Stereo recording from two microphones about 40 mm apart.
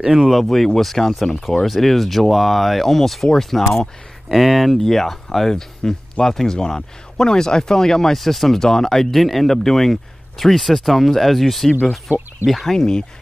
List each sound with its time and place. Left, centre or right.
0.1 s speech: centre
0.4 s speech: centre
12.1 s speech: right
12.4 s speech: centre
12.7 s speech: centre